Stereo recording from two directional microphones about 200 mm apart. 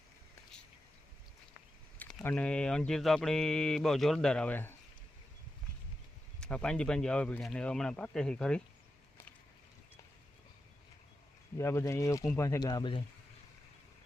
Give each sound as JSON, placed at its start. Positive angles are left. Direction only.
{"t": 2.0, "sound": "speech", "side_deg": 5}
{"t": 6.4, "sound": "speech", "side_deg": 5}
{"t": 11.5, "sound": "speech", "side_deg": 15}